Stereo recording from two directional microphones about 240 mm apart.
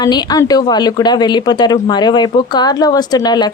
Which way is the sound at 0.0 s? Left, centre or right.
Centre.